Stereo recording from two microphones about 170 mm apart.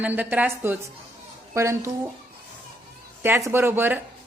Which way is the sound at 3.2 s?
15° right (ahead or behind).